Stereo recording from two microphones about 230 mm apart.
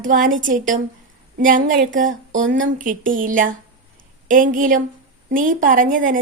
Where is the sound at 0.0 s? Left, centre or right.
Right.